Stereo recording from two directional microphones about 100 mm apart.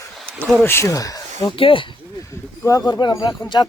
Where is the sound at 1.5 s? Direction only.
60° left (ahead or behind).